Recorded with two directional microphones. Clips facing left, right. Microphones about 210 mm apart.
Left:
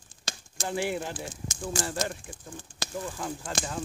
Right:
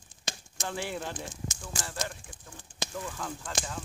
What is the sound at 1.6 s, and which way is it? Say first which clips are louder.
Speech: left 8 dB; 30° left (ahead or behind).